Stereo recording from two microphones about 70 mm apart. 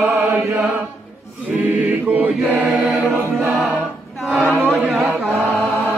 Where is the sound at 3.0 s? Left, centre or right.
Right.